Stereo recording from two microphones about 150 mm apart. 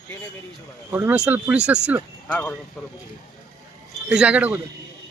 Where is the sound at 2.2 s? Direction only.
10° left (ahead or behind).